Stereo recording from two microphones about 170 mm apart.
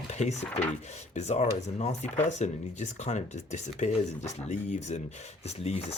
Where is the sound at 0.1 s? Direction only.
40° left (ahead or behind).